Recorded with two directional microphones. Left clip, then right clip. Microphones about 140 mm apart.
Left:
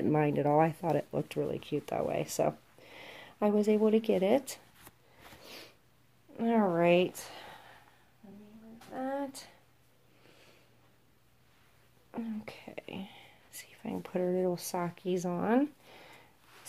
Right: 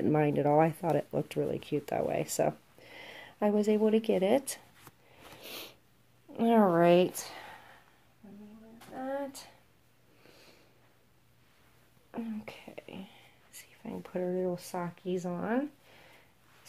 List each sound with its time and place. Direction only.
0.0 s speech: centre (ahead or behind)
5.4 s sniff: 35° right (ahead or behind)
6.3 s speech: 40° right (ahead or behind)
6.7 s speech: 25° right (ahead or behind)
8.9 s a sound: 20° left (ahead or behind)
12.1 s speech: 5° left (ahead or behind)
12.7 s whispering: 50° left (ahead or behind)
13.9 s speech: 45° left (ahead or behind); by 16.2 s 65° left (ahead or behind)